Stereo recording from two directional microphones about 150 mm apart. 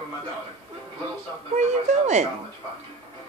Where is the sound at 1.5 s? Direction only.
50° right (ahead or behind).